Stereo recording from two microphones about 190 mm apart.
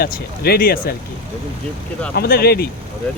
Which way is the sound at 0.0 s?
55° left (ahead or behind).